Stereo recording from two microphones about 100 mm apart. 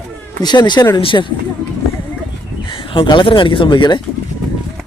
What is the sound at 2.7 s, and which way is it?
Speech, 60° left (ahead or behind).